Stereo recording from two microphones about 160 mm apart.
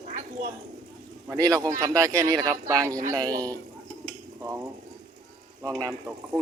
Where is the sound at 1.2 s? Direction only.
20° right (ahead or behind).